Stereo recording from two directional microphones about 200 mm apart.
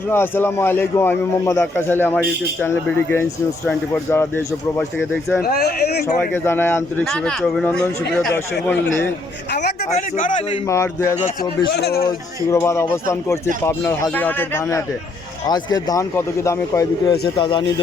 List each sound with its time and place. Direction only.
0.1 s a man's voice: 10° left (ahead or behind)
5.4 s speech: 50° left (ahead or behind)
6.1 s a man's voice: 10° left (ahead or behind)
7.0 s a man's voice: centre (ahead or behind)
9.5 s a man's voice: 60° left (ahead or behind)
10.2 s a man's voice: 40° left (ahead or behind)
10.7 s a man's voice: 15° left (ahead or behind)
11.7 s speech: 55° left (ahead or behind)
12.5 s a man's voice: 15° left (ahead or behind)
17.2 s speech: 25° left (ahead or behind)